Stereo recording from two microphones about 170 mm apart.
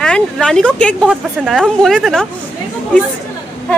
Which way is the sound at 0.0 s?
5° left (ahead or behind).